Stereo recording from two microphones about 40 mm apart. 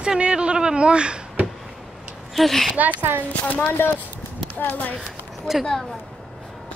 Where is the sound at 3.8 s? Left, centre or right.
Left.